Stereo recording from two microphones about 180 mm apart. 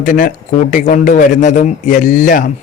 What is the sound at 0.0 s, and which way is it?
Speech, 45° left (ahead or behind).